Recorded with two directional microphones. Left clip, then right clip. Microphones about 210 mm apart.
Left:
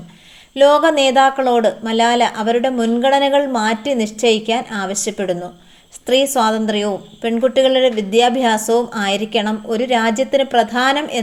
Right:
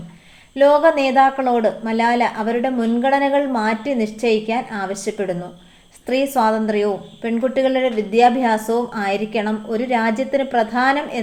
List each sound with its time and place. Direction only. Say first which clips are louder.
0.5 s a woman's voice: left 2 dB; 35° left (ahead or behind)